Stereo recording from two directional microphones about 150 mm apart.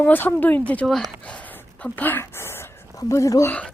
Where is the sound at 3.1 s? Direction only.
20° left (ahead or behind).